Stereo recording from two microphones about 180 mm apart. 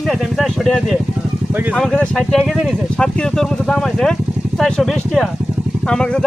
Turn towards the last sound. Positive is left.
turn(degrees=5)  # may be behind; listen again after turning